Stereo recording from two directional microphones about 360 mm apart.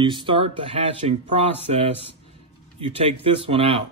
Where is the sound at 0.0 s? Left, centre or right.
Centre.